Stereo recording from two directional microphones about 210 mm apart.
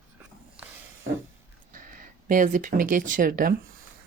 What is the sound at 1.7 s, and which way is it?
Speech, 40° right (ahead or behind).